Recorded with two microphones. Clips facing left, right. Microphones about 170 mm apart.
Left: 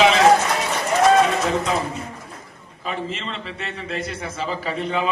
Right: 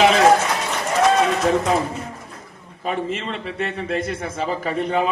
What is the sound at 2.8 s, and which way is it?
A man's voice, 50° right (ahead or behind).